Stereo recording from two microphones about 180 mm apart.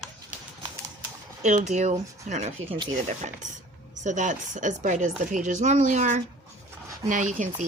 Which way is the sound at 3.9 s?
45° right (ahead or behind).